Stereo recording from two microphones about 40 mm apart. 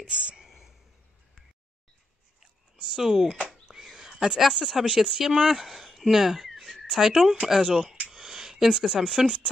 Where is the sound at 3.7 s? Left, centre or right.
Centre.